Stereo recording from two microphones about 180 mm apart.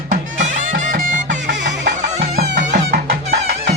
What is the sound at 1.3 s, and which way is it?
Music, 75° right (ahead or behind).